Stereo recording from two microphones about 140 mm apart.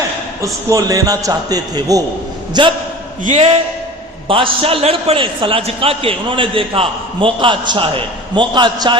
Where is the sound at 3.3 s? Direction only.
45° right (ahead or behind).